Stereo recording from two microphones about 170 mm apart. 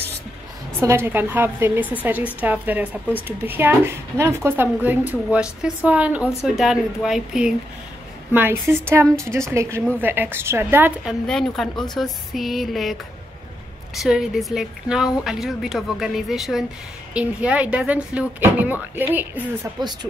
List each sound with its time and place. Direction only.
0.7 s speech: 15° right (ahead or behind)
11.2 s speech: centre (ahead or behind)